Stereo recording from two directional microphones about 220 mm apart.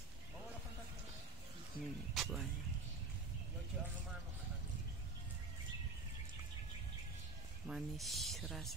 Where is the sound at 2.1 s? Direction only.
Centre (ahead or behind).